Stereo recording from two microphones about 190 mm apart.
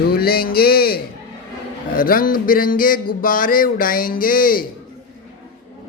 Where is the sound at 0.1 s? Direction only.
55° left (ahead or behind).